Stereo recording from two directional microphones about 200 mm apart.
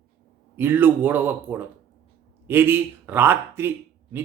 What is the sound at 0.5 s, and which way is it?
Speech, 10° right (ahead or behind).